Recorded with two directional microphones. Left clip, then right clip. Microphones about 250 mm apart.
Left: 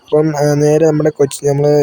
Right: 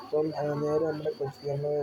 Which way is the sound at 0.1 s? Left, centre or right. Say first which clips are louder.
Left 16 dB; left.